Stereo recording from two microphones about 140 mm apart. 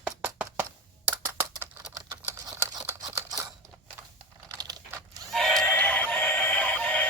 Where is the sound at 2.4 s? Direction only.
25° right (ahead or behind).